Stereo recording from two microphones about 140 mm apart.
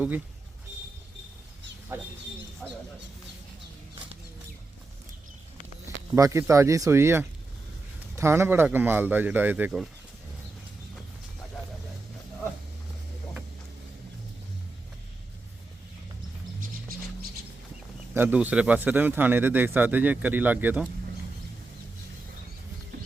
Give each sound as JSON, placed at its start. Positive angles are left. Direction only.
{"t": 1.9, "sound": "speech", "side_deg": -15}
{"t": 6.1, "sound": "speech", "side_deg": -25}
{"t": 18.1, "sound": "speech", "side_deg": -15}